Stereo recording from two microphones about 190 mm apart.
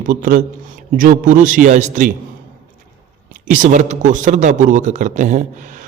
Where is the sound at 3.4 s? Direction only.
45° right (ahead or behind).